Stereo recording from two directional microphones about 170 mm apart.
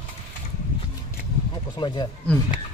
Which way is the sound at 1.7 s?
25° left (ahead or behind).